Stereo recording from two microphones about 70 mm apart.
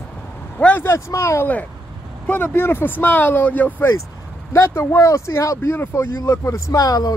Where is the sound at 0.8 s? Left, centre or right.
Left.